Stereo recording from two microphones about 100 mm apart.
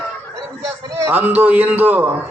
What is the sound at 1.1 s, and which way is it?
A man's voice, 20° right (ahead or behind).